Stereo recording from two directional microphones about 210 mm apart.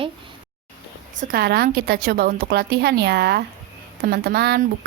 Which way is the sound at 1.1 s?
45° right (ahead or behind).